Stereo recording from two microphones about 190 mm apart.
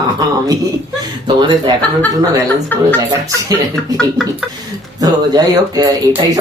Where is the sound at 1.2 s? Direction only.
25° right (ahead or behind).